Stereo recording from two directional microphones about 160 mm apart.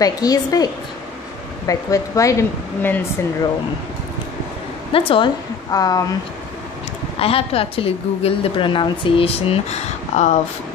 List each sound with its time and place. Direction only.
0.0 s a woman's voice: 25° left (ahead or behind)
1.7 s a woman's voice: 20° left (ahead or behind)
4.9 s a woman's voice: 35° left (ahead or behind)
5.7 s a woman's voice: 25° left (ahead or behind)
7.2 s a woman's voice: 35° left (ahead or behind)